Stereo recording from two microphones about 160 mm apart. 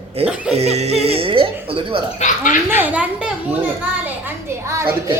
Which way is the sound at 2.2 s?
50° left (ahead or behind).